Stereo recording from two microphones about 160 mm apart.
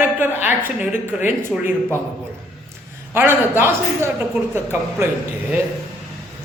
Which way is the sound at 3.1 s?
15° right (ahead or behind).